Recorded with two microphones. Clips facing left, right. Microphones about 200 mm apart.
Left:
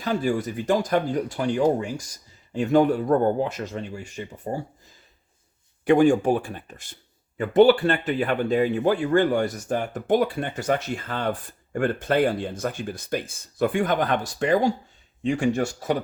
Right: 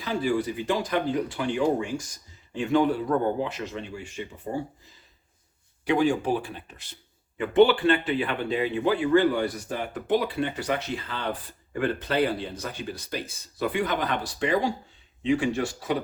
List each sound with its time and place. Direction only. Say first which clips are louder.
0.0 s speech: left 2 dB; 45° left (ahead or behind)
5.8 s speech: left 6 dB; 50° left (ahead or behind)